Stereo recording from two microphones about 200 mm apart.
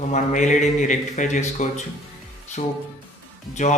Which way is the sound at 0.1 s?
40° left (ahead or behind).